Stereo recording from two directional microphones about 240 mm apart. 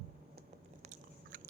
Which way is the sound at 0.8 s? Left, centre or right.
Right.